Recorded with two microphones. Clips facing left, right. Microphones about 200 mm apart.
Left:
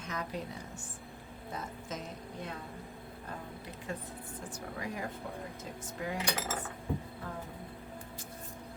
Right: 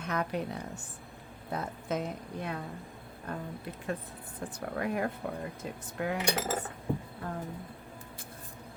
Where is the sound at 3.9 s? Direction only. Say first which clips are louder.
Right 4 dB; 60° right (ahead or behind).